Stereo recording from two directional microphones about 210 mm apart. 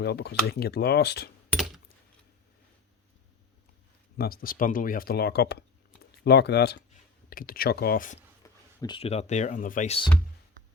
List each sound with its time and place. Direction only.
0.0 s speech: 50° left (ahead or behind)
4.2 s speech: 45° left (ahead or behind)
8.4 s a sound: 15° left (ahead or behind)
8.8 s speech: 25° left (ahead or behind)